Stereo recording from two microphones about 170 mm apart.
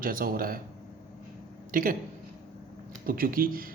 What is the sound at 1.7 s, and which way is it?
Speech, 55° right (ahead or behind).